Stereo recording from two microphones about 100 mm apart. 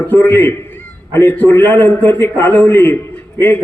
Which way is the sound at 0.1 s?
20° left (ahead or behind).